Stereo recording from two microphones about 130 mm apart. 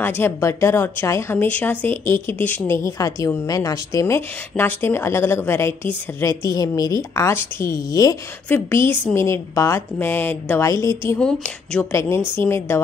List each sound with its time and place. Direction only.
0.0 s speech: 20° left (ahead or behind)
2.8 s a woman's voice: 25° left (ahead or behind)
8.5 s a woman's voice: 15° left (ahead or behind)
11.1 s speech: 5° left (ahead or behind)
11.9 s a woman's voice: 20° left (ahead or behind)